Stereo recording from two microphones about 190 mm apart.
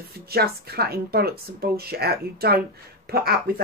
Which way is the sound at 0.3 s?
55° right (ahead or behind).